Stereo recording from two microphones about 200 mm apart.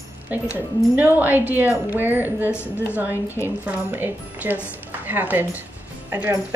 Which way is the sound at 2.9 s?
10° right (ahead or behind).